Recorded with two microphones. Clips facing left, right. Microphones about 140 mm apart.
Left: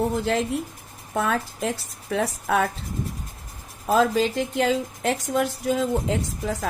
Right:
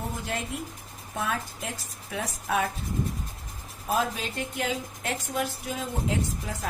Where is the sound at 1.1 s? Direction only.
70° left (ahead or behind).